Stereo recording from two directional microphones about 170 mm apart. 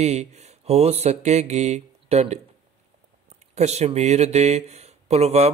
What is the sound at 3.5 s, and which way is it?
Speech, 40° right (ahead or behind).